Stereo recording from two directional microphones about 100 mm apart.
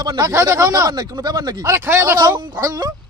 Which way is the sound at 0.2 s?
30° right (ahead or behind).